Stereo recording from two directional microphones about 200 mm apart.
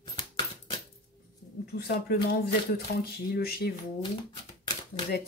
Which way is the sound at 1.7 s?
50° left (ahead or behind).